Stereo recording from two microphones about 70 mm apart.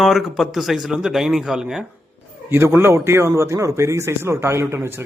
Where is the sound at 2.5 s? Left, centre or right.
Right.